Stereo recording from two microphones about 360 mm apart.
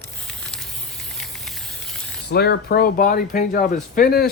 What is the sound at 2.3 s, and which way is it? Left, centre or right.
Speech, left.